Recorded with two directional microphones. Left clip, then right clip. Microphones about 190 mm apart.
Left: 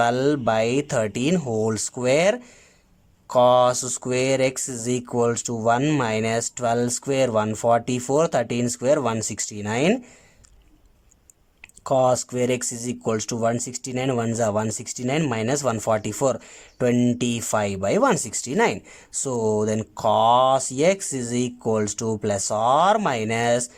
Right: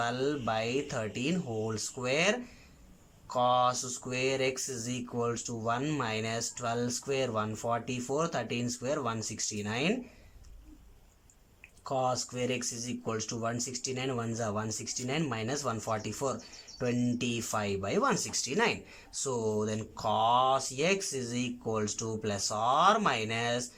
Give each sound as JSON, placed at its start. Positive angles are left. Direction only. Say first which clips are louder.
{"t": 0.0, "sound": "speech", "louder": "left 12 dB", "side_deg": 45}
{"t": 11.8, "sound": "speech", "louder": "left 12 dB", "side_deg": 45}